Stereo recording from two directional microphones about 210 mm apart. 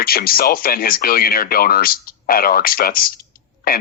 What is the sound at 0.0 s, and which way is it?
Speech, 45° left (ahead or behind).